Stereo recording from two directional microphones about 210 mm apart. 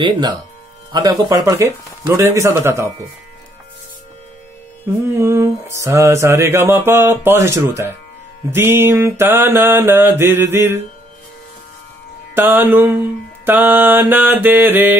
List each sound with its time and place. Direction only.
0.0 s speech: 20° right (ahead or behind)
0.9 s mantra: 15° right (ahead or behind)
5.1 s mantra: 15° right (ahead or behind)
12.4 s mantra: 10° right (ahead or behind)